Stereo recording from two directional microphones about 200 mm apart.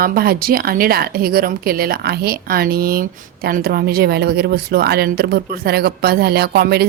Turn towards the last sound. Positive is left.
turn(degrees=-50)  # may be behind; listen again after turning